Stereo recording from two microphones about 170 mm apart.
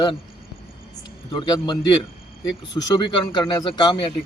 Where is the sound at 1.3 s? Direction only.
25° left (ahead or behind).